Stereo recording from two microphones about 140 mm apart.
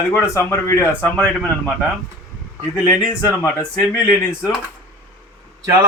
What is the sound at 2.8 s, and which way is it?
Speech, 20° left (ahead or behind).